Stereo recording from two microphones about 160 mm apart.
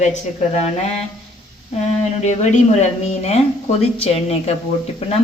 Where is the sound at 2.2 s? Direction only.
45° left (ahead or behind).